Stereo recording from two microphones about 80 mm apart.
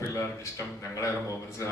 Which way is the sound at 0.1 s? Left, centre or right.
Left.